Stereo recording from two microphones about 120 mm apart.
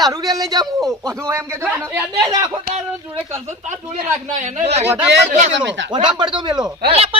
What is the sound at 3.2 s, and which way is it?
Speech, 20° right (ahead or behind).